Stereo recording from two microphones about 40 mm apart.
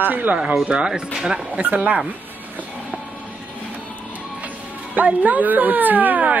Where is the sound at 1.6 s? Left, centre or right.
Right.